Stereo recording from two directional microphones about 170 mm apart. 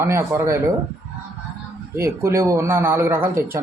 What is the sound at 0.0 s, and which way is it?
Speech, 15° right (ahead or behind).